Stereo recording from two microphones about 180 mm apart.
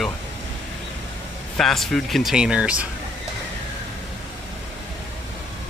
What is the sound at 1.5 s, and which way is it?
Speech, centre (ahead or behind).